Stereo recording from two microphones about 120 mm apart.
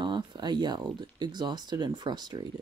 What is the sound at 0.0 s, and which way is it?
Speech, 40° right (ahead or behind).